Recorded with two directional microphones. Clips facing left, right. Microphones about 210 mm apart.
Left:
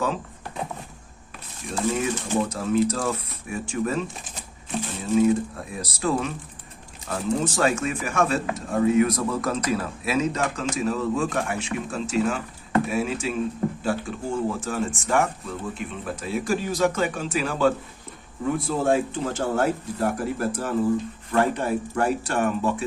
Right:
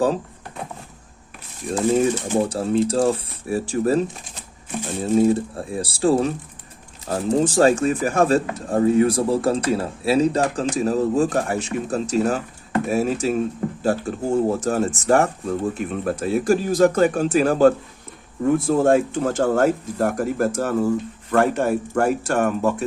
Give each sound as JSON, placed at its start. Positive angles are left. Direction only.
{"t": 2.0, "sound": "speech", "side_deg": -35}
{"t": 5.1, "sound": "speech", "side_deg": -35}